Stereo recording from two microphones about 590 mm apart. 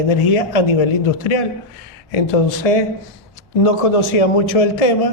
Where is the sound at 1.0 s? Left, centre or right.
Left.